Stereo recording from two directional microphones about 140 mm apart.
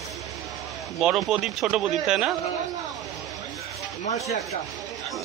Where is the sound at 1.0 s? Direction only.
5° right (ahead or behind).